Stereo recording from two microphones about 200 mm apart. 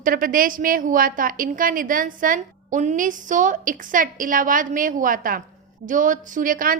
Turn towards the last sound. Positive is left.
turn(degrees=-45)  # may be behind; listen again after turning